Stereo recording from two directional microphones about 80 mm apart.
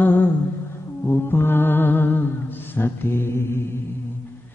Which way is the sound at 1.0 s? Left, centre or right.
Left.